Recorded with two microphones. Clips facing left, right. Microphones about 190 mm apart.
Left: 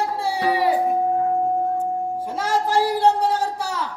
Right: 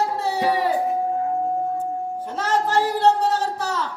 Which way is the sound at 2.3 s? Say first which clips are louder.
Right 2 dB; 10° left (ahead or behind).